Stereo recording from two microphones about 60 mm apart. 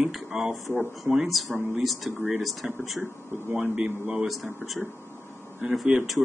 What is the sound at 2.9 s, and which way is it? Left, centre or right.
Speech, right.